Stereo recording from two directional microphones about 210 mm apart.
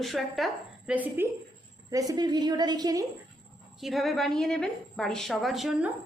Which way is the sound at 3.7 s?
Centre (ahead or behind).